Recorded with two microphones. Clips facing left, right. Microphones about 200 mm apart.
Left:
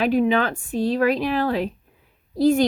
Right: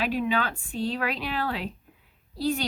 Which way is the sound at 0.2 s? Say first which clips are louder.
Left 7 dB; 45° left (ahead or behind).